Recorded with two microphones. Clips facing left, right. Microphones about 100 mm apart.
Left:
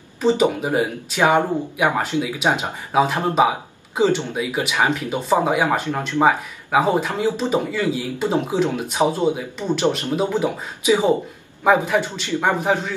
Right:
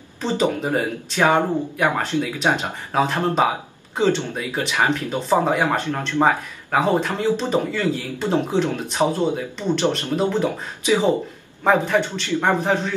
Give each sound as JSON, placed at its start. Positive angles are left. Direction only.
{"t": 0.2, "sound": "speech", "side_deg": 15}